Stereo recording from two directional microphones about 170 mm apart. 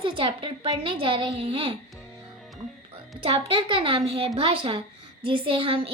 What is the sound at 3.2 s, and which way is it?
A woman's voice, 35° right (ahead or behind).